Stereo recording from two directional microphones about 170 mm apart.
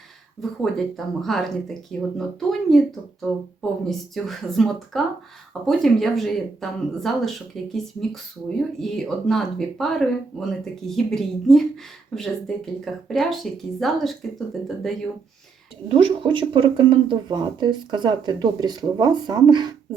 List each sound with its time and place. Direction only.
0.6 s speech: centre (ahead or behind)
15.9 s speech: 30° right (ahead or behind)